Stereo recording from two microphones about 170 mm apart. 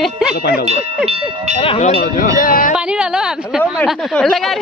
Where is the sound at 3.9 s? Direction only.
5° left (ahead or behind).